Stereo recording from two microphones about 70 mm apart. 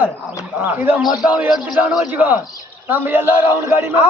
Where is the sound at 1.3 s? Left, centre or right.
Centre.